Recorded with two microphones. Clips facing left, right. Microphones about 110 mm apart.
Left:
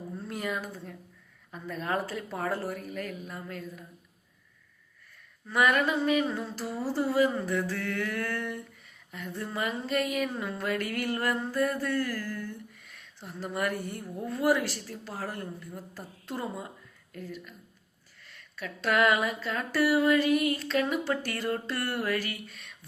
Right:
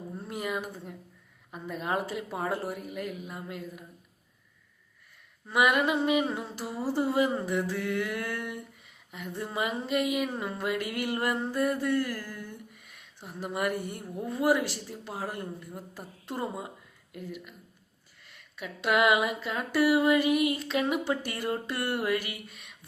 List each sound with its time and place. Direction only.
0.2 s speech: 10° right (ahead or behind)
5.5 s speech: 15° right (ahead or behind)